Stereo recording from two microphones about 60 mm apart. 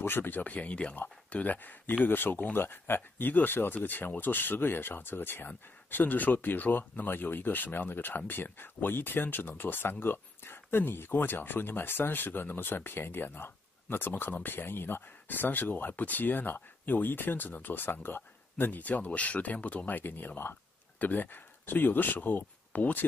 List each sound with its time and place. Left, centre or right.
0.0 s speech: left